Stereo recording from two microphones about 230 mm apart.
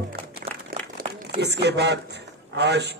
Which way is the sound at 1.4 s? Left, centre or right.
Right.